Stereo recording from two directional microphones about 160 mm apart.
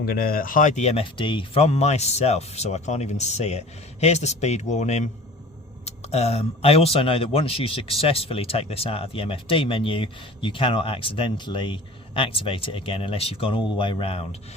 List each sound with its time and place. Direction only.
0.0 s speech: 70° left (ahead or behind); by 14.3 s 35° left (ahead or behind)